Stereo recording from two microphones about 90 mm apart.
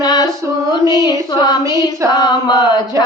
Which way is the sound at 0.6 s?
35° right (ahead or behind).